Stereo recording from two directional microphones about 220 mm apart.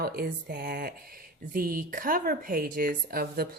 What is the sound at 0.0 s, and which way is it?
Speech, 45° right (ahead or behind).